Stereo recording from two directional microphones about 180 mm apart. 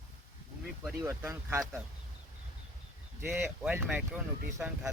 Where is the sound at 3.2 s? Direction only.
10° right (ahead or behind).